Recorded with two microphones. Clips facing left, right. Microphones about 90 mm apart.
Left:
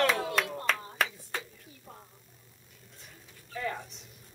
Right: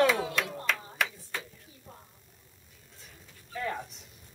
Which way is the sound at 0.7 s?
40° left (ahead or behind).